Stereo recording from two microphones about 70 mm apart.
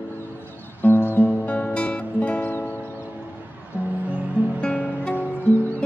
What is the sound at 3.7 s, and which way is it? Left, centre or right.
Music, right.